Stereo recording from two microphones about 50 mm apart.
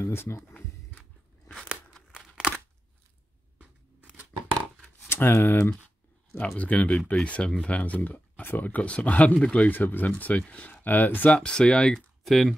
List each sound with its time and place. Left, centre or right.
0.0 s speech: left
5.1 s speech: left
6.3 s speech: left
9.7 s speech: left
11.3 s speech: centre
12.3 s speech: centre